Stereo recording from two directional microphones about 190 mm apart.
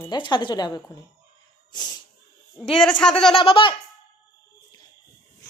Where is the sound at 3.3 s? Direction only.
30° left (ahead or behind).